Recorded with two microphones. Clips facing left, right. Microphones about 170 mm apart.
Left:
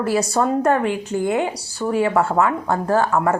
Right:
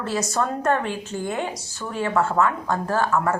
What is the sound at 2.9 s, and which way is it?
Speech, 15° left (ahead or behind).